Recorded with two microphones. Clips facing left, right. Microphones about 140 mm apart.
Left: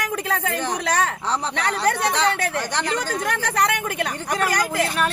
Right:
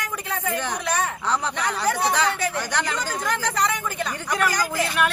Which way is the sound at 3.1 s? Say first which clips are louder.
Left 1 dB; 65° left (ahead or behind).